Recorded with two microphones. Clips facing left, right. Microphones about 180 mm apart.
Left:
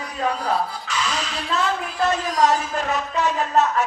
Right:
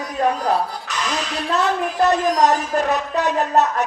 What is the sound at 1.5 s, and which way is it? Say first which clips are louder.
A woman's voice: right 4 dB; 40° right (ahead or behind).